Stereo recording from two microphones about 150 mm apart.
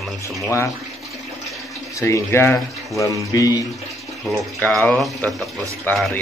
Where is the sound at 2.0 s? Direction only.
15° left (ahead or behind).